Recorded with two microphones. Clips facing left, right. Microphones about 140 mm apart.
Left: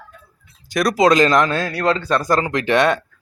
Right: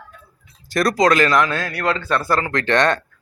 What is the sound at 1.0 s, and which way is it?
Speech, 20° left (ahead or behind).